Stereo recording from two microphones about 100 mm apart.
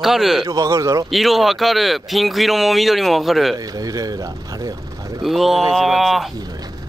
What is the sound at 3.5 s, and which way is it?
Speech, 35° right (ahead or behind).